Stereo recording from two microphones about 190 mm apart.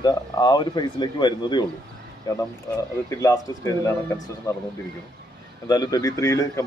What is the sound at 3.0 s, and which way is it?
Speech, 15° left (ahead or behind).